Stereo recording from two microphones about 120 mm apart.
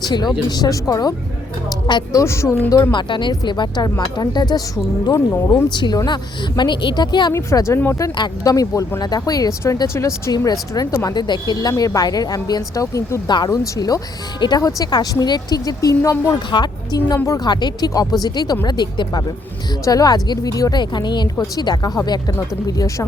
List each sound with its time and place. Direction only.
0.0 s a woman's voice: 35° left (ahead or behind)
2.2 s speech: 25° left (ahead or behind)
2.9 s a woman's voice: 40° left (ahead or behind)
5.6 s a woman's voice: 35° left (ahead or behind)
7.3 s speech: 25° left (ahead or behind)
8.1 s a woman's voice: 35° left (ahead or behind)
16.5 s a woman's voice: 40° left (ahead or behind)